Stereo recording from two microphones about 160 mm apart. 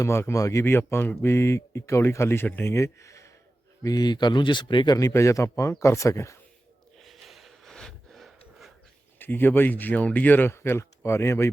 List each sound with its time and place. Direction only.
0.0 s speech: 15° left (ahead or behind)
4.9 s speech: 20° left (ahead or behind)
7.0 s snort: centre (ahead or behind)
9.1 s speech: 10° left (ahead or behind)